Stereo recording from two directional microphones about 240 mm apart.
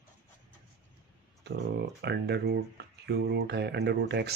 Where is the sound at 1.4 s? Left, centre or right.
Right.